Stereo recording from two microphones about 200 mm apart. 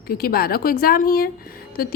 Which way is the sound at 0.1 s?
50° left (ahead or behind).